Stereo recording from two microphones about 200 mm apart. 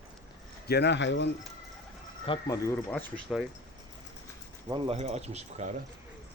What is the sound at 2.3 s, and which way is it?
Speech, 15° left (ahead or behind).